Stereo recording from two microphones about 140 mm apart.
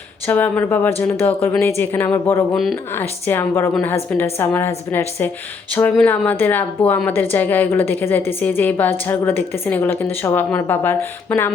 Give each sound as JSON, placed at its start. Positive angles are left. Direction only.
{"t": 0.3, "sound": "a woman's voice", "side_deg": 15}
{"t": 2.5, "sound": "speech", "side_deg": 0}
{"t": 2.9, "sound": "a woman's voice", "side_deg": 15}